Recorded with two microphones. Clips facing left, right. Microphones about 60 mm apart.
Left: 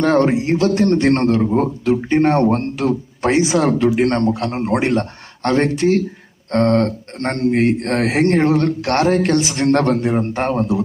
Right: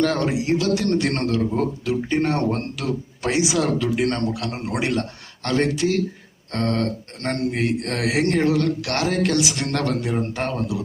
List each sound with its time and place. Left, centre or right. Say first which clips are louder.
0.0 s a man's voice: left 6 dB; left